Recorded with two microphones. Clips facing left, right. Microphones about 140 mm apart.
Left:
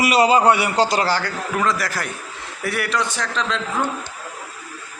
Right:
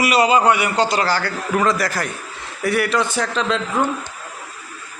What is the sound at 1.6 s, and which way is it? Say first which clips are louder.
A man's voice: right 2 dB; centre (ahead or behind).